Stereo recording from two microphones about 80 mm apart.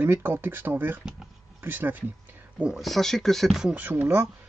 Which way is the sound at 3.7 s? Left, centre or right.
Right.